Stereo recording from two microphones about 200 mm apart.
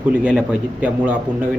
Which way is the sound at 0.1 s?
5° right (ahead or behind).